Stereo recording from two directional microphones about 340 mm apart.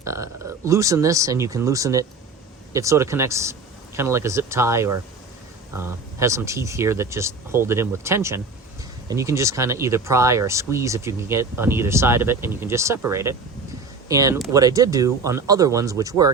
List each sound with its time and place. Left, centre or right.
0.0 s speech: centre